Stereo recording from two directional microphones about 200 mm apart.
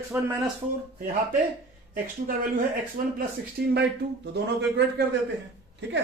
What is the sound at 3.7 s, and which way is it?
A man's voice, 55° right (ahead or behind).